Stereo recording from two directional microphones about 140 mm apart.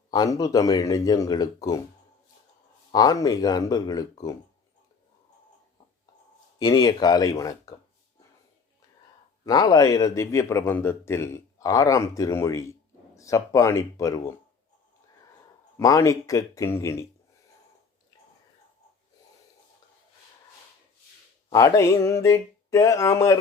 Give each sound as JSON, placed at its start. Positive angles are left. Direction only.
{"t": 0.1, "sound": "speech", "side_deg": 25}
{"t": 2.9, "sound": "speech", "side_deg": 25}
{"t": 6.6, "sound": "speech", "side_deg": 30}
{"t": 9.5, "sound": "speech", "side_deg": 25}
{"t": 15.8, "sound": "speech", "side_deg": 25}
{"t": 21.5, "sound": "speech", "side_deg": 25}